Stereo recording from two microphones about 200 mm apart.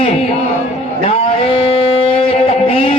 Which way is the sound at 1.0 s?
30° left (ahead or behind).